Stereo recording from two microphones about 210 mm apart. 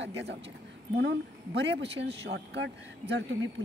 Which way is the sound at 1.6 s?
55° right (ahead or behind).